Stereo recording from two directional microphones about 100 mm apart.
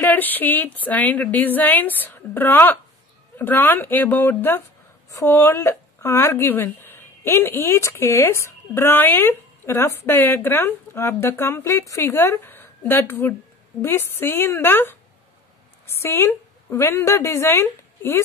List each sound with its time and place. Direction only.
0.0 s a woman's voice: 20° left (ahead or behind)